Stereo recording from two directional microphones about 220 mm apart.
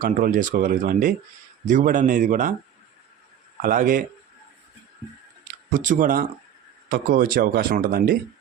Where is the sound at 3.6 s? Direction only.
40° right (ahead or behind).